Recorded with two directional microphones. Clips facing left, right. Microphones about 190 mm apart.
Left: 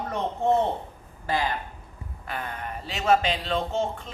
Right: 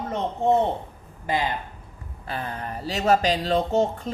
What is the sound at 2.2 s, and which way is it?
Speech, 30° right (ahead or behind).